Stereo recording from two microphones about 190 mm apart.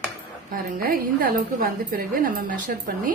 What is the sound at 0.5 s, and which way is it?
A woman's voice, 50° right (ahead or behind).